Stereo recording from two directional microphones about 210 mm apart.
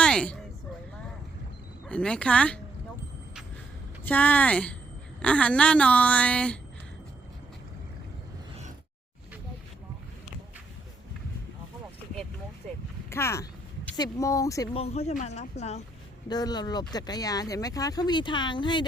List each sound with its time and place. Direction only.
0.0 s a sound: 5° left (ahead or behind)
1.9 s a woman's voice: 5° left (ahead or behind)
4.0 s a woman's voice: 5° left (ahead or behind)
13.1 s speech: 10° left (ahead or behind)
14.7 s speech: 30° left (ahead or behind)
16.3 s speech: 20° left (ahead or behind)